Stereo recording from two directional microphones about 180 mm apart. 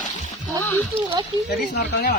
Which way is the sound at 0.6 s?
10° left (ahead or behind).